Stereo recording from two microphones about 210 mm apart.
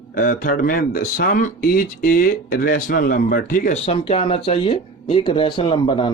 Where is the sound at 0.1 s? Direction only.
40° left (ahead or behind).